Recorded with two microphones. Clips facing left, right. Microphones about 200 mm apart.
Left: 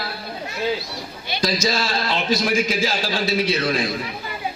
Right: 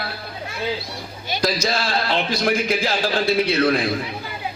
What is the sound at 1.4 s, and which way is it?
A man's voice, 60° right (ahead or behind).